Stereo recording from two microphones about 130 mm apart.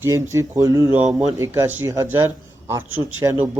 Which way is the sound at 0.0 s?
20° right (ahead or behind).